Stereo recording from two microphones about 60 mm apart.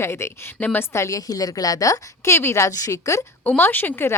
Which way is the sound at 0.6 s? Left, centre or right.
Left.